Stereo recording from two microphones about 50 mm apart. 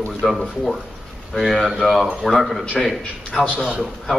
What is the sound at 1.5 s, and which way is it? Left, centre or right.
Speech, centre.